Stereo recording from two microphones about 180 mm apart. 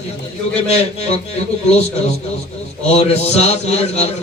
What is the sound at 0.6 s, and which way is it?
Speech, 35° left (ahead or behind).